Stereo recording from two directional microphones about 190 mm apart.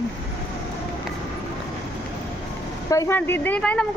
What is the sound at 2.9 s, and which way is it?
Speech, 15° left (ahead or behind).